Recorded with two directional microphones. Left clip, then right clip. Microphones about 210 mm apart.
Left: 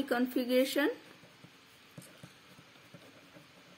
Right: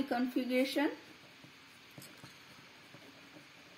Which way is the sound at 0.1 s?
55° left (ahead or behind).